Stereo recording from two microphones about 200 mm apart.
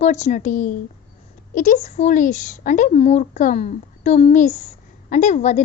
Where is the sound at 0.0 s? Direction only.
35° left (ahead or behind).